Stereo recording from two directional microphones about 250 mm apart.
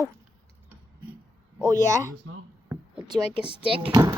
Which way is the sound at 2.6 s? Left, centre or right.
Centre.